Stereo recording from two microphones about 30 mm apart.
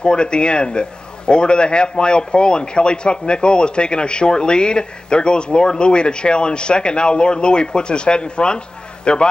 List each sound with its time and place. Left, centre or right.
0.0 s a man's voice: left